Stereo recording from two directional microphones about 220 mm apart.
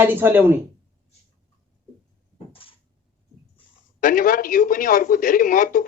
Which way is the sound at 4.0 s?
40° left (ahead or behind).